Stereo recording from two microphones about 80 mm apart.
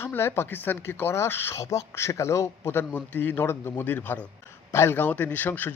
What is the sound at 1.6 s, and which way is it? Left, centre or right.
Speech, left.